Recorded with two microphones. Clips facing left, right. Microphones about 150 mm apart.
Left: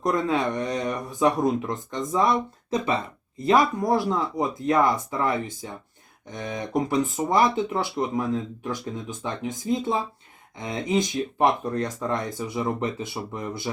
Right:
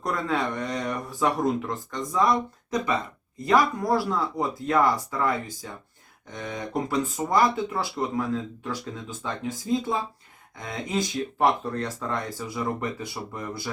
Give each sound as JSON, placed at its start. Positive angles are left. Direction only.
{"t": 0.0, "sound": "speech", "side_deg": 20}
{"t": 6.9, "sound": "speech", "side_deg": 20}